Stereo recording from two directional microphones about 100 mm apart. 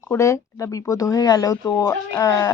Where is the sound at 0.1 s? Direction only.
30° left (ahead or behind).